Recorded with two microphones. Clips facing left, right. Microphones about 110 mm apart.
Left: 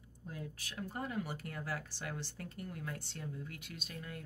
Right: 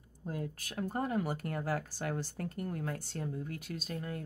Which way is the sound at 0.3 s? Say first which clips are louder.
Right 7 dB; 45° right (ahead or behind).